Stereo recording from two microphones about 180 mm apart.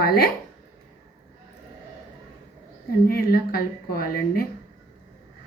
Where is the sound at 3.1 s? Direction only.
60° left (ahead or behind).